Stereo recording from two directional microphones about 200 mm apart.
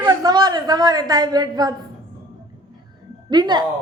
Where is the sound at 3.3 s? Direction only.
20° right (ahead or behind).